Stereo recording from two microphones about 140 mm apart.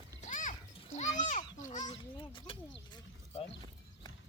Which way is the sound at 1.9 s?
40° left (ahead or behind).